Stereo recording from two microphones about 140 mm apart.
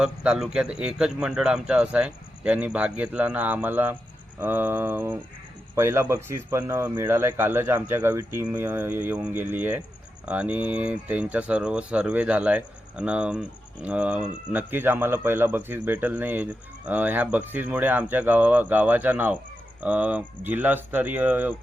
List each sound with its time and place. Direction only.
0.0 s speech: 5° right (ahead or behind)